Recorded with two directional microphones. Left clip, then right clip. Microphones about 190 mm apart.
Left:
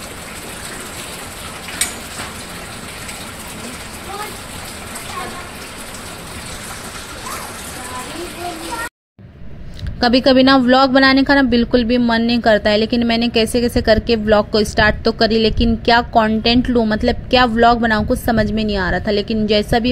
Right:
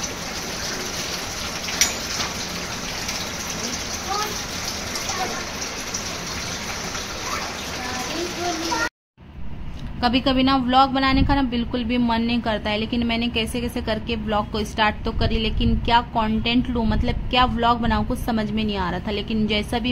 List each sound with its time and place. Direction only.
9.9 s a woman's voice: 35° left (ahead or behind)